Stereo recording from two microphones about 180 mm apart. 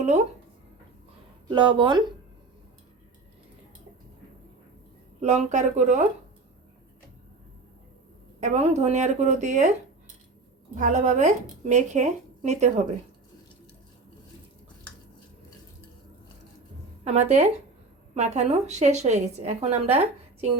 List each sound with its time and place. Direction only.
1.5 s speech: 25° right (ahead or behind)
5.2 s a woman's voice: 40° right (ahead or behind)
8.4 s a woman's voice: 40° right (ahead or behind)
10.8 s a woman's voice: 45° right (ahead or behind)
17.0 s a woman's voice: 40° right (ahead or behind)